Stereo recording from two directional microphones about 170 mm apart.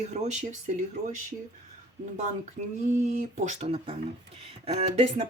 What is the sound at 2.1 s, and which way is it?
Speech, 45° right (ahead or behind).